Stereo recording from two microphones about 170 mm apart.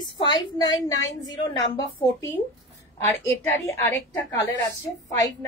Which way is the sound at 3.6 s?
15° left (ahead or behind).